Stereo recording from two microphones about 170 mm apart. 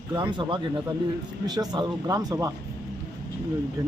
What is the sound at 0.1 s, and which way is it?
Speech, 25° right (ahead or behind).